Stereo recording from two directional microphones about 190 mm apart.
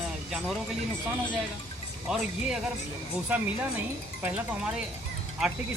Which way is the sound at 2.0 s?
5° right (ahead or behind).